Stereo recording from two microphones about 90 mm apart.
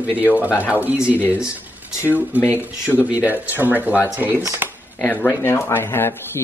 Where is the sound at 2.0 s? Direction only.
25° left (ahead or behind).